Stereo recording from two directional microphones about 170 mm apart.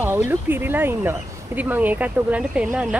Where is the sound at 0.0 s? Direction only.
10° right (ahead or behind).